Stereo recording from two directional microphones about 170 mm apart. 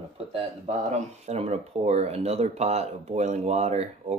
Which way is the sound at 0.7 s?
40° right (ahead or behind).